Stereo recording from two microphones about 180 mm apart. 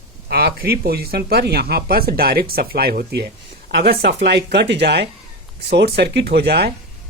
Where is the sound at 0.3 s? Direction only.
60° right (ahead or behind).